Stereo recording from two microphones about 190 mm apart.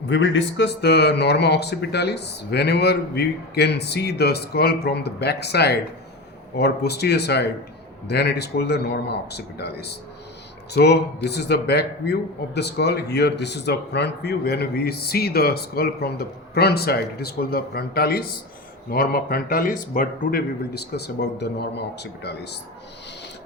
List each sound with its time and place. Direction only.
0.1 s a man's voice: 70° left (ahead or behind)